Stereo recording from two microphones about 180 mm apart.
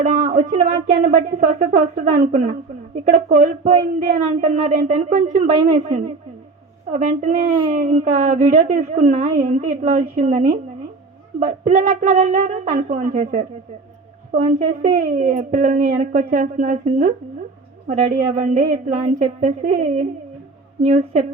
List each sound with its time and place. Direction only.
0.0 s a woman's voice: 45° right (ahead or behind)
6.9 s a woman's voice: 45° right (ahead or behind)
18.3 s a woman's voice: 45° right (ahead or behind)